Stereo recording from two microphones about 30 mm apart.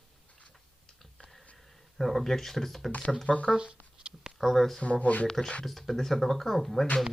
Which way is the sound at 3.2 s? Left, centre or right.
Left.